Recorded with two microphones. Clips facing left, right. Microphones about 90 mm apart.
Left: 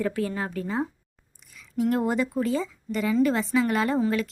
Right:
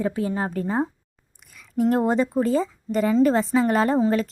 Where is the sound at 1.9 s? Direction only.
35° right (ahead or behind).